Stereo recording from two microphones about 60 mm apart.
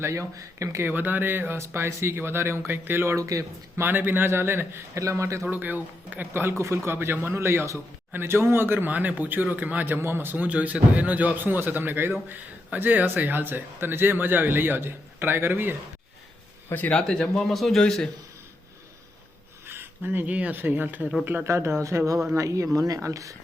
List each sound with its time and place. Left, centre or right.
0.0 s speech: right
0.8 s a man's voice: right
3.2 s speech: right
3.8 s a man's voice: right
4.9 s speech: right
5.5 s a man's voice: right
8.9 s a man's voice: right
10.3 s a man's voice: right
16.7 s speech: left
17.0 s a man's voice: centre
19.6 s speech: right
21.4 s speech: right